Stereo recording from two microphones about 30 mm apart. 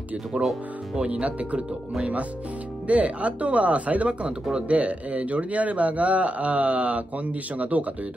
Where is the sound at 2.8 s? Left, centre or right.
Right.